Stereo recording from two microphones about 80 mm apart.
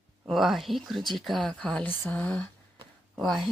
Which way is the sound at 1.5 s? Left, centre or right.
Centre.